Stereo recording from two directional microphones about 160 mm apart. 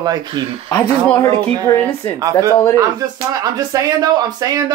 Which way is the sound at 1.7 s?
30° left (ahead or behind).